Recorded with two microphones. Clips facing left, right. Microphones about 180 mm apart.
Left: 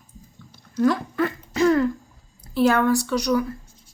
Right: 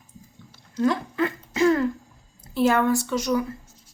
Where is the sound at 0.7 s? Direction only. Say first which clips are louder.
Left 2 dB; 20° right (ahead or behind).